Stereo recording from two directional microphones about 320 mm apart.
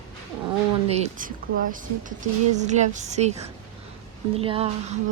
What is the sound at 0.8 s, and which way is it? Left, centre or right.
Speech, centre.